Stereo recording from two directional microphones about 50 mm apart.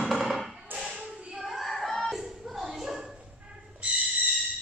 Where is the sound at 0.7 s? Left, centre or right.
Right.